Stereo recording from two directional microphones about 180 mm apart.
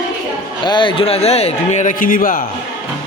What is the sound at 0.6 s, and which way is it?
Speech, 25° left (ahead or behind).